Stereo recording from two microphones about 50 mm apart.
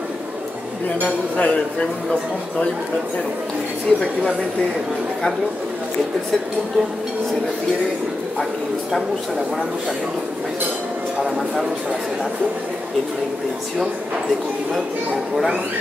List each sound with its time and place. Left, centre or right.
1.0 s speech: centre
3.9 s a woman's voice: centre